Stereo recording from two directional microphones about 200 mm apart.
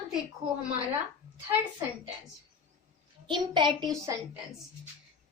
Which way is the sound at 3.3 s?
25° right (ahead or behind).